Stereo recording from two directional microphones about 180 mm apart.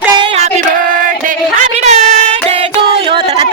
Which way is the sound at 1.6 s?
40° right (ahead or behind).